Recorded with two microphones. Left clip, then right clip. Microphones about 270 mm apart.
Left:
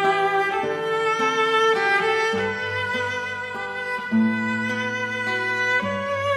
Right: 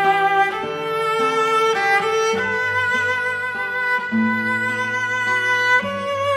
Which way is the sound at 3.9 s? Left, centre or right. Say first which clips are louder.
Right 4 dB; right.